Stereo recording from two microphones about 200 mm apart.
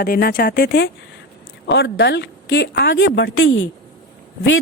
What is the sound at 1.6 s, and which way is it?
Speech, 65° left (ahead or behind).